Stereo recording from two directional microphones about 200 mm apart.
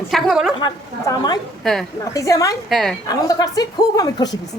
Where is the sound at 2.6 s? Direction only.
Centre (ahead or behind).